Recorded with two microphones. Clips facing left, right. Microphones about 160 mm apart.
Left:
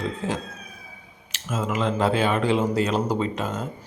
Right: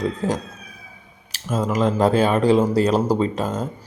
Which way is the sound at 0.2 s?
40° right (ahead or behind).